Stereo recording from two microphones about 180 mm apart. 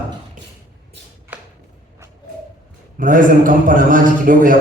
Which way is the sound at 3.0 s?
50° right (ahead or behind).